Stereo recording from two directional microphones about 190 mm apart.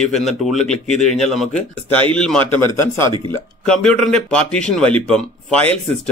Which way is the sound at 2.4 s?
25° right (ahead or behind).